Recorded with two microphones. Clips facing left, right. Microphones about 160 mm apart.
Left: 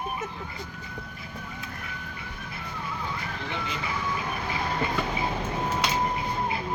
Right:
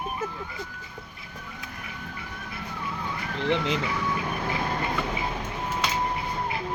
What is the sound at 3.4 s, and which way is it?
Speech, 80° right.